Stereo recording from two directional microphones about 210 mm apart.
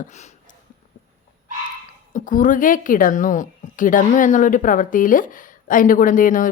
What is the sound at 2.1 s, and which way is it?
A woman's voice, 40° left (ahead or behind).